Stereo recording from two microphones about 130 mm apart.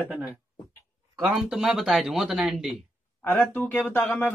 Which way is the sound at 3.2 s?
15° left (ahead or behind).